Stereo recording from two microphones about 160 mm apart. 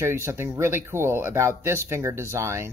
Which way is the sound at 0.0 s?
15° right (ahead or behind).